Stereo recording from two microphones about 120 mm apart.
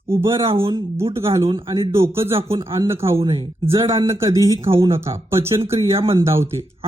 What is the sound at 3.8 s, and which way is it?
Speech, 45° right (ahead or behind).